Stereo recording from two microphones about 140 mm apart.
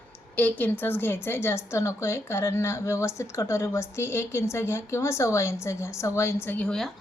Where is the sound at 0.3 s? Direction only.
10° left (ahead or behind).